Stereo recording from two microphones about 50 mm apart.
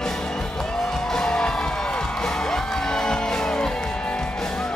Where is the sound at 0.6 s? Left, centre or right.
Centre.